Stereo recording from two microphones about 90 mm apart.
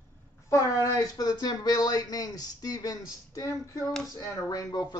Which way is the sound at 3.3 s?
40° left (ahead or behind).